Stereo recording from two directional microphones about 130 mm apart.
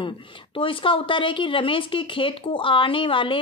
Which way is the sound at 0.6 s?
45° left (ahead or behind).